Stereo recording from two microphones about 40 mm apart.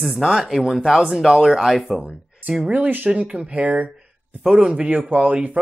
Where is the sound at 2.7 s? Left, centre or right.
Right.